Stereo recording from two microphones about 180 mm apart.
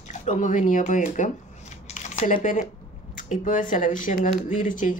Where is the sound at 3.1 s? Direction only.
45° left (ahead or behind).